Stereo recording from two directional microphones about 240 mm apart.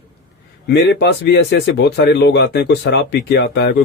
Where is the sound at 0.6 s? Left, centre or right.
Left.